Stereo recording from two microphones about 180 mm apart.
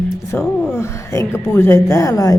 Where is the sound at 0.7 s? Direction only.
15° left (ahead or behind).